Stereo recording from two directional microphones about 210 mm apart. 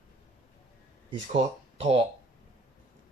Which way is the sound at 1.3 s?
25° right (ahead or behind).